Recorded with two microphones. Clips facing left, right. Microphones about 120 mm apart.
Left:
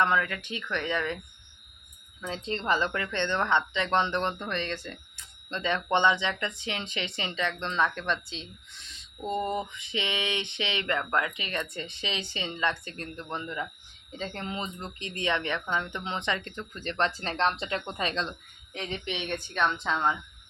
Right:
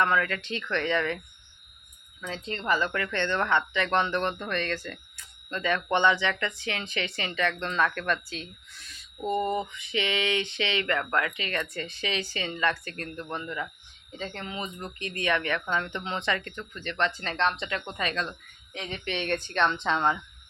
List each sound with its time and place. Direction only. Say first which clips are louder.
0.0 s speech: right 1 dB; 15° left (ahead or behind)
2.2 s speech: left 1 dB; 25° left (ahead or behind)
14.9 s speech: right 2 dB; 20° left (ahead or behind)
19.0 s speech: right 4 dB; 15° left (ahead or behind)